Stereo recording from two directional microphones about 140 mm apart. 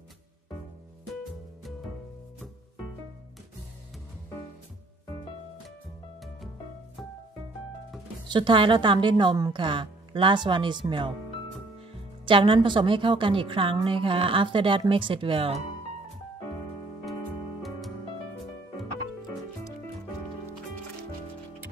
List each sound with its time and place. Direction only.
8.3 s a woman's voice: 35° right (ahead or behind)
12.3 s a woman's voice: 35° right (ahead or behind)
17.6 s music: centre (ahead or behind)